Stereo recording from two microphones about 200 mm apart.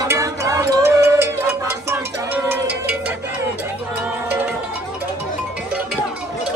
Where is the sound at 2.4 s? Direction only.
10° right (ahead or behind).